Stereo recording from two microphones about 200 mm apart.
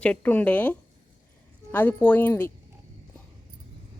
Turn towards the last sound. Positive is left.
turn(degrees=10)  # may be behind; listen again after turning